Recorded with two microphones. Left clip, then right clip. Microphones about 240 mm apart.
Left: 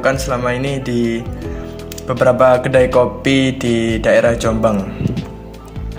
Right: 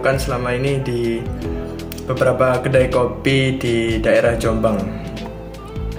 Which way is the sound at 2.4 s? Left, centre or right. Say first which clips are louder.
Left 5 dB; left.